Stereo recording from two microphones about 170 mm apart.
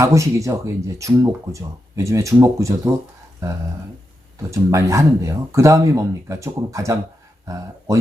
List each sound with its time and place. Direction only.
0.0 s speech: 20° right (ahead or behind)
4.5 s speech: 20° right (ahead or behind)